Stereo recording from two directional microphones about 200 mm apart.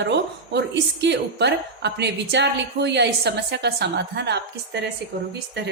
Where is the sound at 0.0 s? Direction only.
60° right (ahead or behind).